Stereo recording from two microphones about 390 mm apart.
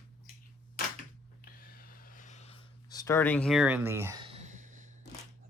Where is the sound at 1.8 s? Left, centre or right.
Left; by 4.9 s centre.